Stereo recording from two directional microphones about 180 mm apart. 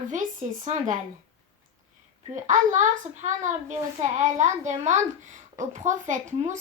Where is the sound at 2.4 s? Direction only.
45° right (ahead or behind).